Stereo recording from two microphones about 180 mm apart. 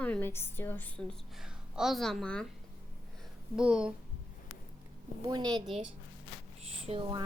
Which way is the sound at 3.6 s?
5° right (ahead or behind).